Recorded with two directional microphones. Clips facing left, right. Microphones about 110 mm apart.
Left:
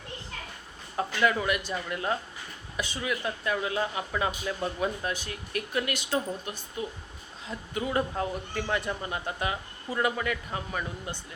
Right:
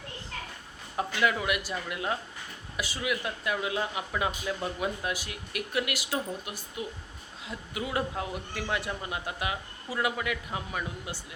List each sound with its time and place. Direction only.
0.9 s speech: 5° right (ahead or behind)